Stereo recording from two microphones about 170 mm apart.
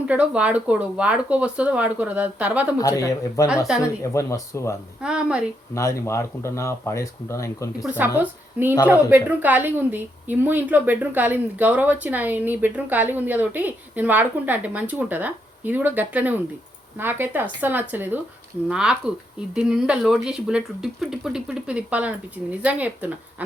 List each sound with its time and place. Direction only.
0.1 s a woman's voice: 5° right (ahead or behind)
2.7 s speech: 20° left (ahead or behind)
5.0 s speech: 5° right (ahead or behind)
5.7 s speech: 20° left (ahead or behind)
7.8 s a woman's voice: 10° right (ahead or behind)